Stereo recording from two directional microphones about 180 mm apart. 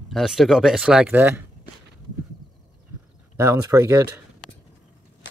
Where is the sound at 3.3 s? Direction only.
15° right (ahead or behind).